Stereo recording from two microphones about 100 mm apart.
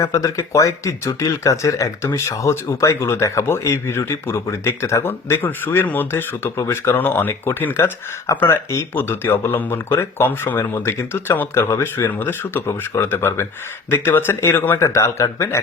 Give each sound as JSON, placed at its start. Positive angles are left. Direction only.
{"t": 0.0, "sound": "speech", "side_deg": 30}